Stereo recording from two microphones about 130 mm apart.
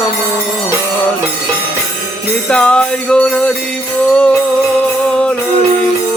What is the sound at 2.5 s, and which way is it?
Music, 10° left (ahead or behind).